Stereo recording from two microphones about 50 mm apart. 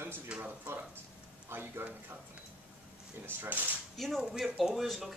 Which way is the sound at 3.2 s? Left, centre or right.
Right.